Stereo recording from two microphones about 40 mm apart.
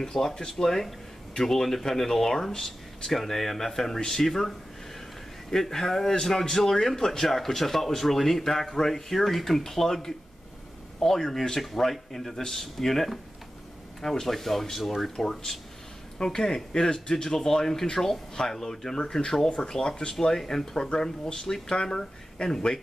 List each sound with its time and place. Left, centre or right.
0.0 s speech: centre